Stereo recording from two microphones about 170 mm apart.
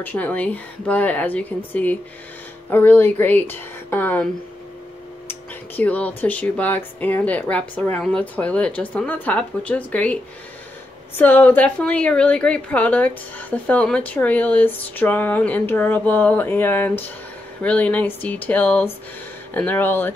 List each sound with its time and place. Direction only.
0.0 s a woman's voice: 10° left (ahead or behind)
5.3 s a woman's voice: 10° left (ahead or behind)
11.1 s a woman's voice: 10° left (ahead or behind)